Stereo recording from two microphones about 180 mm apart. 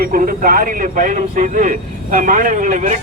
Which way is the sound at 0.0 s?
50° right (ahead or behind).